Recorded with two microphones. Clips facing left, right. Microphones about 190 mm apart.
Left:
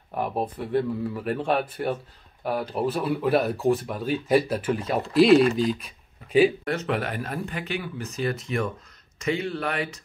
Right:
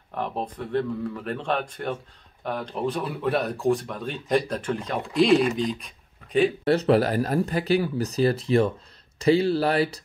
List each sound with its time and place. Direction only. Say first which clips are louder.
0.1 s speech: left 2 dB; 10° left (ahead or behind)
6.6 s speech: right 7 dB; 35° right (ahead or behind)